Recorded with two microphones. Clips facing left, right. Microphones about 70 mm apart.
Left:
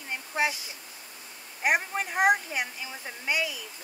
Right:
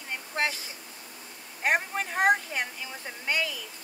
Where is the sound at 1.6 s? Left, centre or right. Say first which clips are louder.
Even; centre.